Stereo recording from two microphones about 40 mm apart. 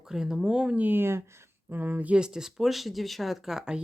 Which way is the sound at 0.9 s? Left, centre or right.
Right.